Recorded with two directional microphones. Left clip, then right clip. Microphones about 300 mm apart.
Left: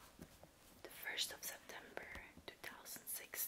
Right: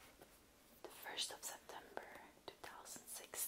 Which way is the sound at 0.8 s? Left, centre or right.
Right.